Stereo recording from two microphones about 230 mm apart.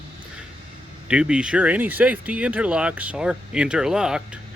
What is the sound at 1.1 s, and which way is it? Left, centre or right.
Speech, centre.